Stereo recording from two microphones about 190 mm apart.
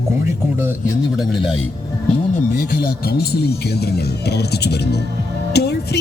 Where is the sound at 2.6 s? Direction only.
55° left (ahead or behind).